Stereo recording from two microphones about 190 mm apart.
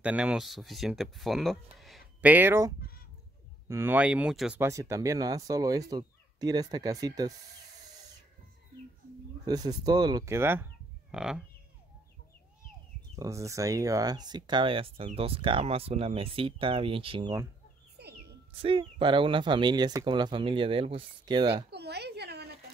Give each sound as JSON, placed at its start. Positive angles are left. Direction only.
{"t": 0.0, "sound": "speech", "side_deg": -5}
{"t": 4.6, "sound": "speech", "side_deg": -15}
{"t": 9.5, "sound": "speech", "side_deg": -20}
{"t": 13.1, "sound": "speech", "side_deg": -15}
{"t": 18.5, "sound": "speech", "side_deg": -30}
{"t": 21.6, "sound": "a sound", "side_deg": -60}